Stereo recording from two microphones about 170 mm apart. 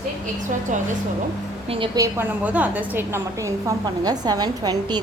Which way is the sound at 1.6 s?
35° right (ahead or behind).